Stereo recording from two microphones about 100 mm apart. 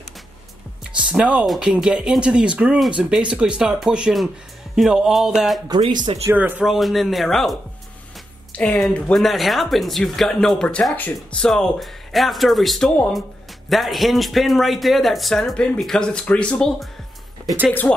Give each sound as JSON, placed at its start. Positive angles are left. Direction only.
{"t": 0.9, "sound": "speech", "side_deg": -10}
{"t": 6.2, "sound": "speech", "side_deg": -20}
{"t": 6.6, "sound": "speech", "side_deg": 0}
{"t": 8.5, "sound": "speech", "side_deg": 10}
{"t": 9.1, "sound": "speech", "side_deg": 0}
{"t": 17.9, "sound": "speech", "side_deg": 10}